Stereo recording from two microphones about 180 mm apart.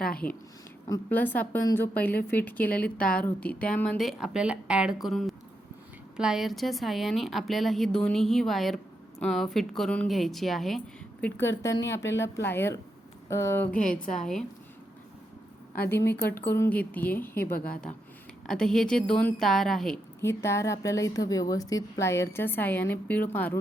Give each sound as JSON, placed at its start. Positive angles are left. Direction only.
{"t": 1.1, "sound": "a woman's voice", "side_deg": 10}
{"t": 11.3, "sound": "a woman's voice", "side_deg": 15}
{"t": 14.0, "sound": "a woman's voice", "side_deg": 45}
{"t": 15.9, "sound": "a woman's voice", "side_deg": 10}
{"t": 17.3, "sound": "a woman's voice", "side_deg": 55}
{"t": 18.4, "sound": "a woman's voice", "side_deg": 5}
{"t": 20.2, "sound": "a woman's voice", "side_deg": 15}